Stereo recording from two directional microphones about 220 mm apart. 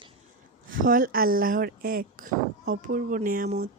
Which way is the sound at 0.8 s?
40° right (ahead or behind).